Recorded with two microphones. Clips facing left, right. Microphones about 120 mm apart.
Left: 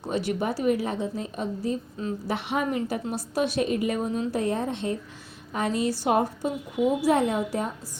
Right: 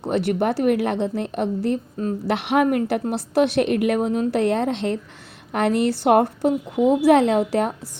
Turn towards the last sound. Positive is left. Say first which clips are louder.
# right 7 dB
turn(degrees=-75)  # may be behind; listen again after turning